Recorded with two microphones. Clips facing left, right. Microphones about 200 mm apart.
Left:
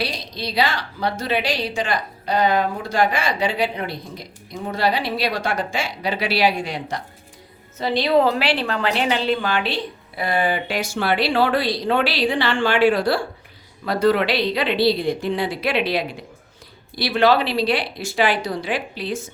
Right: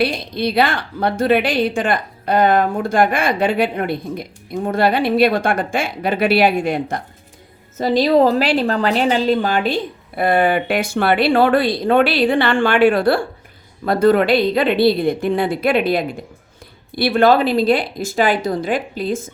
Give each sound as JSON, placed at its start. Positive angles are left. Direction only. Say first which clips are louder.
{"t": 0.0, "sound": "a woman's voice", "louder": "right 8 dB", "side_deg": -55}